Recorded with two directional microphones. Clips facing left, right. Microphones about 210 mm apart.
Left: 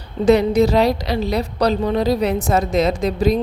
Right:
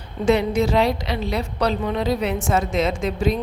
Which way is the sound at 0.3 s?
40° left (ahead or behind).